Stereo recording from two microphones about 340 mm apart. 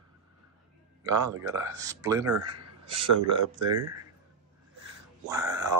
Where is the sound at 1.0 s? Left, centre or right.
Centre.